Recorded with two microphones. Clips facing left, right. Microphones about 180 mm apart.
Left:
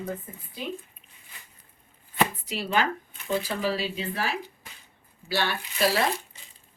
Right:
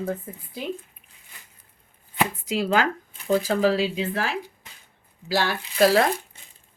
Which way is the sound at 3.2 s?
40° right (ahead or behind).